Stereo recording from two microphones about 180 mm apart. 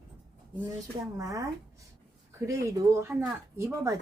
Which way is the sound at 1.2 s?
20° right (ahead or behind).